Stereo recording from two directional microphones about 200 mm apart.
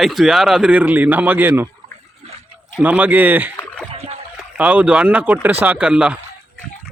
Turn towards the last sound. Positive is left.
turn(degrees=-5)  # may be behind; listen again after turning